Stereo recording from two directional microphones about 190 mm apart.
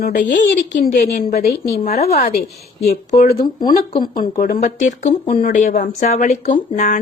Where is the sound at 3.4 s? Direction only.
25° left (ahead or behind).